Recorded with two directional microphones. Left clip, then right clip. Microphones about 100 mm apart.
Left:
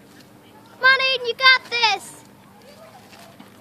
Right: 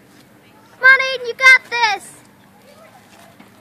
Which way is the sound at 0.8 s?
20° right (ahead or behind).